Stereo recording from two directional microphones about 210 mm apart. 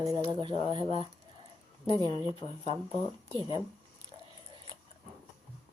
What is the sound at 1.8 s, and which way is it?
A woman's voice, 20° left (ahead or behind).